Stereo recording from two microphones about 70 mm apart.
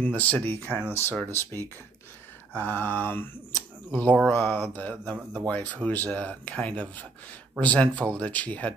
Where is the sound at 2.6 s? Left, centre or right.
Left.